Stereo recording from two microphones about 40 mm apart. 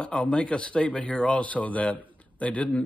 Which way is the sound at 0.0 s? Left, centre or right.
Left.